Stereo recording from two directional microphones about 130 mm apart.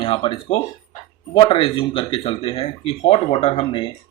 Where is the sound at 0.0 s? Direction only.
45° left (ahead or behind).